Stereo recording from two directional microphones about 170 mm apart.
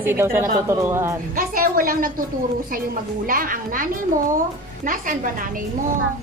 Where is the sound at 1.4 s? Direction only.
55° right (ahead or behind).